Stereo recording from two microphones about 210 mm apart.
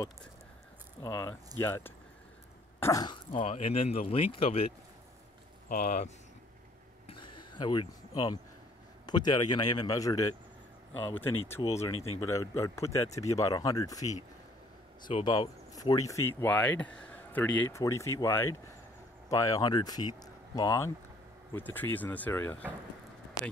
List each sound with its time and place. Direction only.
1.0 s speech: 15° left (ahead or behind)
5.7 s speech: 40° left (ahead or behind)
7.1 s a sound: 20° left (ahead or behind)
9.0 s speech: 20° left (ahead or behind)